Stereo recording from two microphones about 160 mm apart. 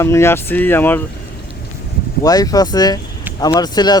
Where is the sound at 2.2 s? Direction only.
25° left (ahead or behind).